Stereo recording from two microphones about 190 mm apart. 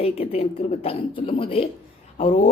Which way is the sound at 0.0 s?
30° left (ahead or behind).